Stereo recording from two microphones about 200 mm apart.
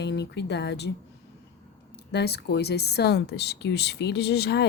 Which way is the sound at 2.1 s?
55° left (ahead or behind).